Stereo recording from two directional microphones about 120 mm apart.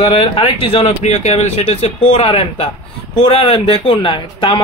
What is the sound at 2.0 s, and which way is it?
Speech, 50° left (ahead or behind).